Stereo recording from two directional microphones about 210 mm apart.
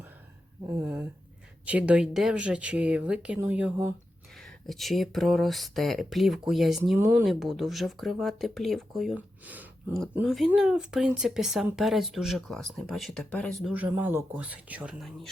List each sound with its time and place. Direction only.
0.6 s speech: 15° right (ahead or behind)
0.9 s a sound: 10° right (ahead or behind)
1.6 s speech: 5° right (ahead or behind)